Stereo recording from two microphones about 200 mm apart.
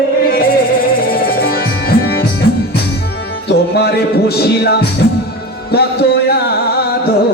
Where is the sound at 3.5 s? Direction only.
55° left (ahead or behind).